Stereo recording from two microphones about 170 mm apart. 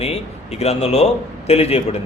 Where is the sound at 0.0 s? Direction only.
35° left (ahead or behind).